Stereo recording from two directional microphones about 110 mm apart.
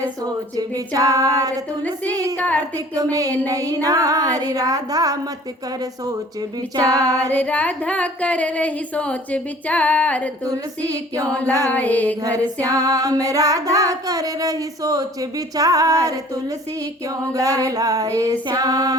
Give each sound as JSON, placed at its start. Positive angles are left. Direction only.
{"t": 0.3, "sound": "music", "side_deg": -35}
{"t": 2.4, "sound": "speech", "side_deg": 15}
{"t": 2.7, "sound": "music", "side_deg": -35}
{"t": 6.7, "sound": "music", "side_deg": -35}
{"t": 7.3, "sound": "speech", "side_deg": 15}
{"t": 11.7, "sound": "speech", "side_deg": 15}
{"t": 12.5, "sound": "music", "side_deg": -30}